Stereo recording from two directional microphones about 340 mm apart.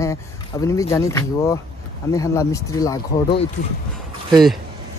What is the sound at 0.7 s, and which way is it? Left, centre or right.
Speech, centre.